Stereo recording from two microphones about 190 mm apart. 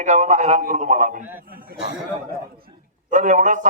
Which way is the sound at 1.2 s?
10° right (ahead or behind).